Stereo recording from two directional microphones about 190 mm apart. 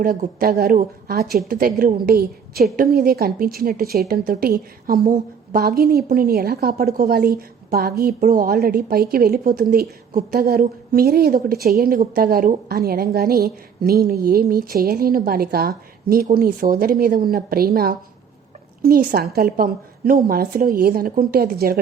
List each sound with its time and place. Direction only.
0.0 s a woman's voice: 50° right (ahead or behind)